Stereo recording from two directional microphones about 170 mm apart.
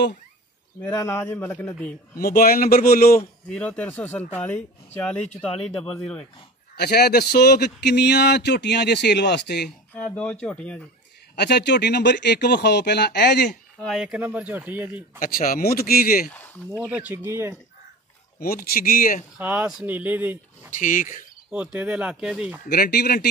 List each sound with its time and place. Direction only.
0.9 s a man's voice: 15° left (ahead or behind)
2.1 s speech: 60° left (ahead or behind)
3.4 s a man's voice: 5° left (ahead or behind)
6.7 s speech: 70° left (ahead or behind)
10.4 s a man's voice: 5° left (ahead or behind)
11.3 s speech: 75° left (ahead or behind)
13.8 s speech: centre (ahead or behind)
15.1 s speech: 55° left (ahead or behind)
16.7 s speech: 10° right (ahead or behind)
18.4 s speech: 60° left (ahead or behind)
19.3 s speech: 10° right (ahead or behind)
20.8 s cricket: 50° left (ahead or behind)
21.7 s speech: 10° right (ahead or behind)
22.7 s speech: 65° left (ahead or behind)